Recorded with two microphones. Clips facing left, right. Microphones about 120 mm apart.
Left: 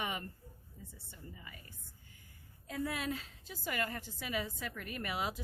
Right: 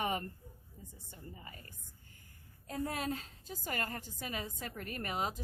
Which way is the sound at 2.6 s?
40° right (ahead or behind).